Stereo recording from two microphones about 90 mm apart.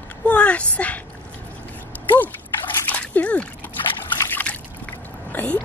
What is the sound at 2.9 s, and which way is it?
Splash, 15° left (ahead or behind).